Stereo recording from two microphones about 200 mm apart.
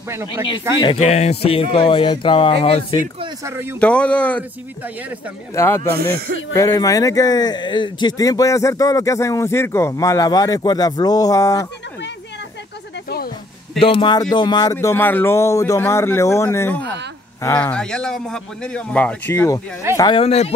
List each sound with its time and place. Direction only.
0.1 s speech: 10° right (ahead or behind)
0.9 s speech: 35° left (ahead or behind)
3.4 s speech: 10° right (ahead or behind)
3.8 s speech: 5° left (ahead or behind)
5.5 s speech: 15° left (ahead or behind)
5.9 s speech: 50° right (ahead or behind)
6.5 s speech: 15° left (ahead or behind)
13.7 s speech: 25° left (ahead or behind); by 19.6 s 10° left (ahead or behind)
20.0 s speech: 25° left (ahead or behind)